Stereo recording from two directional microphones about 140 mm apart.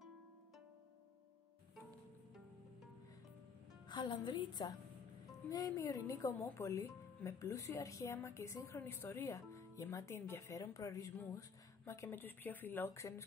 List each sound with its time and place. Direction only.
3.9 s a woman's voice: 30° left (ahead or behind)